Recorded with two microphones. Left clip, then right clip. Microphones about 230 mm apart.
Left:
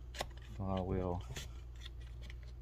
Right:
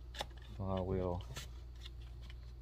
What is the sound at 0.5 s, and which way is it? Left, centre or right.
Speech, centre.